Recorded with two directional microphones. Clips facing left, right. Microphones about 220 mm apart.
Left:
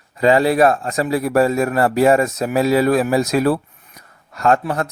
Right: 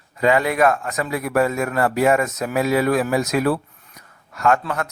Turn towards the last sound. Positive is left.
turn(degrees=35)  # may be behind; listen again after turning